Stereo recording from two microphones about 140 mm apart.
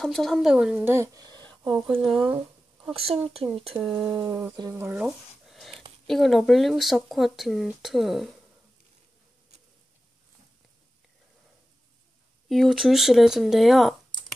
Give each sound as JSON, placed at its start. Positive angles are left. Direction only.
{"t": 0.0, "sound": "speech", "side_deg": 5}
{"t": 1.1, "sound": "a sound", "side_deg": -30}
{"t": 2.0, "sound": "speech", "side_deg": 0}
{"t": 2.9, "sound": "speech", "side_deg": -45}
{"t": 4.6, "sound": "speech", "side_deg": -20}
{"t": 5.0, "sound": "a sound", "side_deg": 0}
{"t": 6.0, "sound": "speech", "side_deg": 0}
{"t": 12.4, "sound": "speech", "side_deg": 0}